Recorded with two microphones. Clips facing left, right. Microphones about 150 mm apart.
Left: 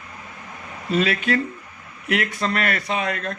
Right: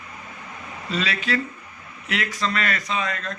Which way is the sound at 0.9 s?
50° left (ahead or behind).